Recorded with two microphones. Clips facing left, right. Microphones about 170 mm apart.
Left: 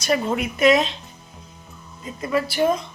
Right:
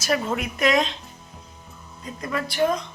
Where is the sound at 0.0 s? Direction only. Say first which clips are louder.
Left 3 dB; centre (ahead or behind).